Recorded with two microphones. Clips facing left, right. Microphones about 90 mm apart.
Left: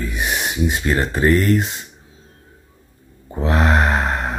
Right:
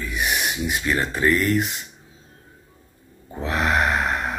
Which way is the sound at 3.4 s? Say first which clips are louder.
Left 4 dB; 35° left (ahead or behind).